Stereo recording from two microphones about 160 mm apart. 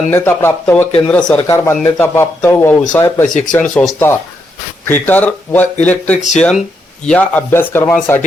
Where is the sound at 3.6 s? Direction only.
5° left (ahead or behind).